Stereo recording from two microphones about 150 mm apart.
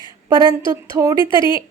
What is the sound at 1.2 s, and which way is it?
Speech, 30° left (ahead or behind).